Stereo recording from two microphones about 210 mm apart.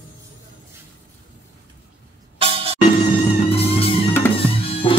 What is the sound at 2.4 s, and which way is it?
Music, 25° right (ahead or behind).